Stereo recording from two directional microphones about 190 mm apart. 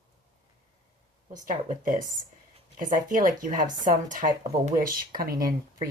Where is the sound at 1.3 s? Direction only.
45° right (ahead or behind).